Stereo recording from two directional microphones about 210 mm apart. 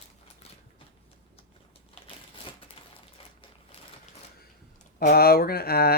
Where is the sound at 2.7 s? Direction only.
25° left (ahead or behind).